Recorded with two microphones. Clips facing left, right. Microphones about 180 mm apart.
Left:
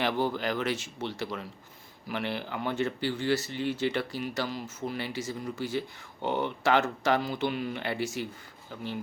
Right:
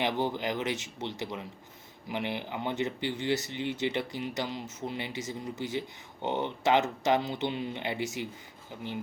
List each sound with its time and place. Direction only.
0.0 s speech: 20° right (ahead or behind)